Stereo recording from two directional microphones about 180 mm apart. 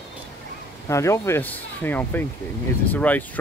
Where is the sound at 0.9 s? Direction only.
15° left (ahead or behind).